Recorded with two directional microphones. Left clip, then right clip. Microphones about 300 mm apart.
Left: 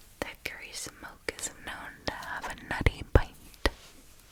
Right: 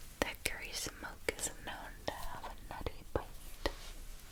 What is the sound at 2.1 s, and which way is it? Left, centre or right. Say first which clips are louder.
Whispering: left 8 dB; left.